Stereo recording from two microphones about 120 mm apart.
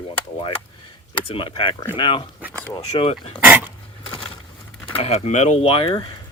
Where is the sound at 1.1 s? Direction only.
45° left (ahead or behind).